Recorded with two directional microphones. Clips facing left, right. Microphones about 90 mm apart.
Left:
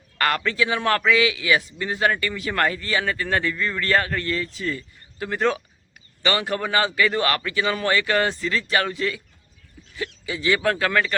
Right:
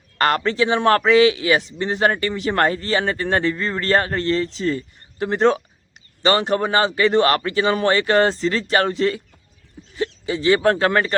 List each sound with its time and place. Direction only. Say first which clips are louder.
0.2 s a man's voice: right 4 dB; 30° right (ahead or behind)
10.2 s a man's voice: right 5 dB; 35° right (ahead or behind)